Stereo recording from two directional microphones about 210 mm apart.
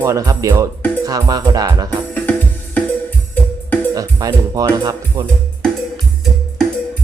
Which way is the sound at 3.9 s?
15° right (ahead or behind).